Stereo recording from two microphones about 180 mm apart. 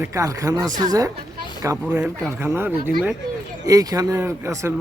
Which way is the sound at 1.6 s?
15° right (ahead or behind).